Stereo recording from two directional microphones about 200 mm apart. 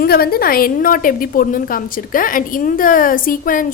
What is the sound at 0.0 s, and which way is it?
A woman's voice, 50° left (ahead or behind).